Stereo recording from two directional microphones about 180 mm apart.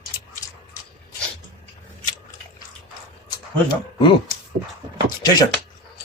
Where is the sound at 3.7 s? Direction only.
25° left (ahead or behind).